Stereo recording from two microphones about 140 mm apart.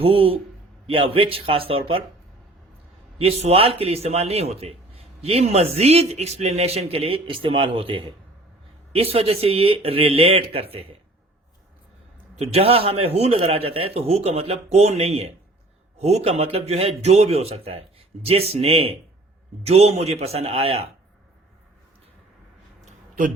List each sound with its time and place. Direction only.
0.0 s speech: 40° right (ahead or behind)
3.2 s a man's voice: 45° right (ahead or behind)
12.4 s a man's voice: 45° right (ahead or behind)
22.9 s a sound: 70° right (ahead or behind)